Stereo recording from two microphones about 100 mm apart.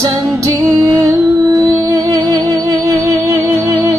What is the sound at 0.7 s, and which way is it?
Music, 35° right (ahead or behind).